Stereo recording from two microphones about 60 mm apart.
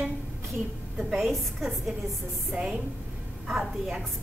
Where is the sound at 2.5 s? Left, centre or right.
Centre.